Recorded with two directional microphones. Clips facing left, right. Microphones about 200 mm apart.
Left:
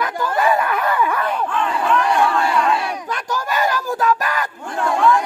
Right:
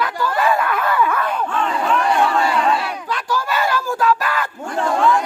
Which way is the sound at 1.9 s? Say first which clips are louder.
Even; 30° right (ahead or behind).